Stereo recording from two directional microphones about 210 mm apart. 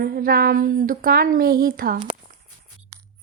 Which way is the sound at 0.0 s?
45° right (ahead or behind).